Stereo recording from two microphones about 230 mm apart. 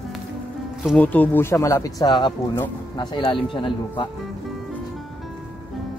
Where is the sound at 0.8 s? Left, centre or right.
Centre; by 4.1 s left.